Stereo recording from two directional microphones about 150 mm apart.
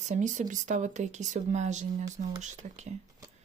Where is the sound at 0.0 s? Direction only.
55° right (ahead or behind).